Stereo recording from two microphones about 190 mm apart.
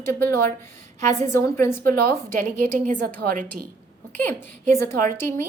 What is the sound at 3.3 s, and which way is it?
Speech, 45° right (ahead or behind).